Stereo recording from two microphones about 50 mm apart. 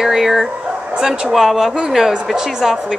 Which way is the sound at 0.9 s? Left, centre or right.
Centre.